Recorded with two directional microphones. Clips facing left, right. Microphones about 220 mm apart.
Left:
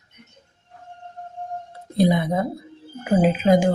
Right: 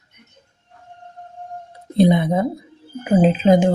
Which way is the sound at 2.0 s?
25° right (ahead or behind).